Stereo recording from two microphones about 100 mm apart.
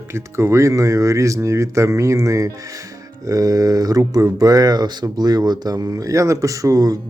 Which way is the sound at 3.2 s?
35° right (ahead or behind).